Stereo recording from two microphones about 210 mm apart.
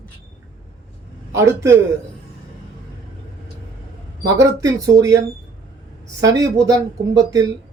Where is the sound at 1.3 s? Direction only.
15° right (ahead or behind).